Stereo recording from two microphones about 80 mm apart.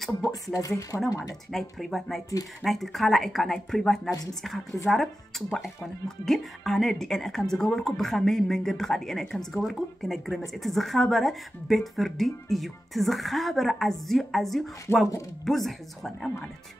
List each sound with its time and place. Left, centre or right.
0.3 s speech: left
1.5 s speech: centre
4.1 s speech: left
4.9 s speech: centre
14.9 s speech: left
15.4 s speech: centre